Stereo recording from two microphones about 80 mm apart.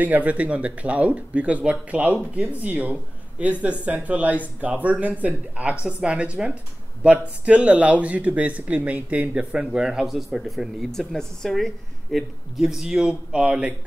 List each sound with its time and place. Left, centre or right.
0.0 s speech: centre